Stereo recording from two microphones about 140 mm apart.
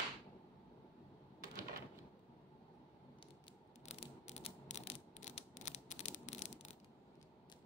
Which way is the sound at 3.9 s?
50° left (ahead or behind).